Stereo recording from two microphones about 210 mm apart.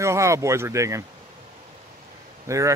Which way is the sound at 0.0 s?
15° right (ahead or behind).